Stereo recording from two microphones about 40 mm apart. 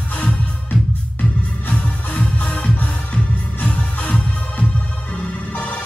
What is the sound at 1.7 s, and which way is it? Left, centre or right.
Music, left.